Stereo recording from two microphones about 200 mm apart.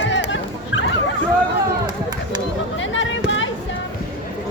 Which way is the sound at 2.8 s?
70° left (ahead or behind).